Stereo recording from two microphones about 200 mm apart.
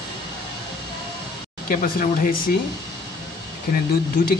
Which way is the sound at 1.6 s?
45° left (ahead or behind).